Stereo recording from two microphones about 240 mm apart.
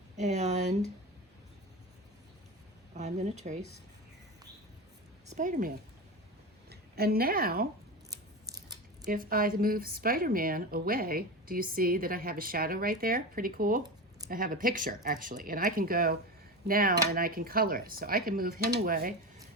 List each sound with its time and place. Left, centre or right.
0.2 s speech: right
2.9 s speech: right
5.3 s a woman's voice: right
8.1 s scissors: centre
9.0 s speech: right